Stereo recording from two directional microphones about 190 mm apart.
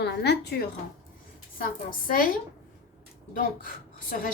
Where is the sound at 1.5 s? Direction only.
50° left (ahead or behind).